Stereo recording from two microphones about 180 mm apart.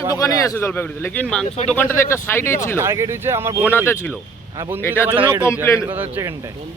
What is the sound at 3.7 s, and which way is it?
Speech, 15° left (ahead or behind).